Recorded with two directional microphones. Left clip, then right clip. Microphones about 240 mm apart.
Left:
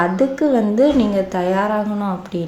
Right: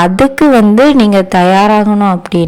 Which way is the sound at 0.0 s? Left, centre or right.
Right.